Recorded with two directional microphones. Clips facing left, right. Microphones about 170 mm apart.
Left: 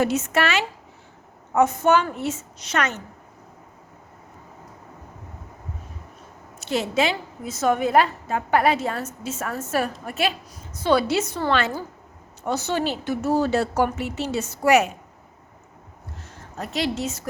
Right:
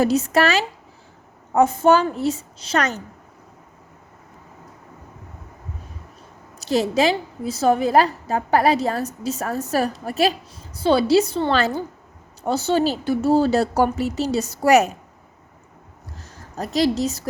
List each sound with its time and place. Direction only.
0.0 s a woman's voice: 35° right (ahead or behind)
6.6 s a woman's voice: 35° right (ahead or behind)
16.1 s a sound: 40° right (ahead or behind)